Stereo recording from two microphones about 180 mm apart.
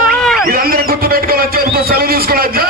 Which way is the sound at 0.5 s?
55° right (ahead or behind).